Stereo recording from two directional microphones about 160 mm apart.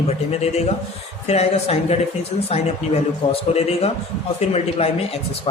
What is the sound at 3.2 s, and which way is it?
Speech, 35° left (ahead or behind).